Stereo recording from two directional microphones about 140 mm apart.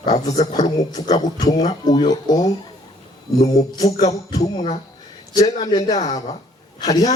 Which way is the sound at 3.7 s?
30° left (ahead or behind).